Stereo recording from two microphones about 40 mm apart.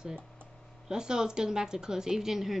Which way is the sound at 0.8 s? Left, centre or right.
Centre.